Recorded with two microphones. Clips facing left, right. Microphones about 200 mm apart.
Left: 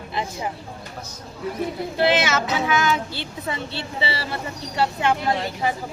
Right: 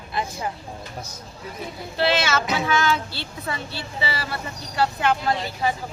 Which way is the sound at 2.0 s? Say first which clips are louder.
Left 2 dB; 20° left (ahead or behind).